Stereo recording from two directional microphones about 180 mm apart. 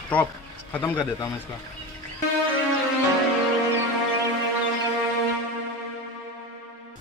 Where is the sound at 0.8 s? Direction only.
25° left (ahead or behind).